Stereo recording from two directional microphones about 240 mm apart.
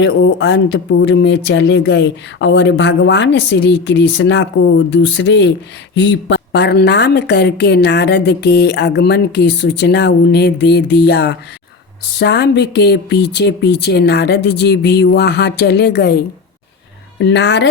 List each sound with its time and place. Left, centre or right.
0.0 s speech: left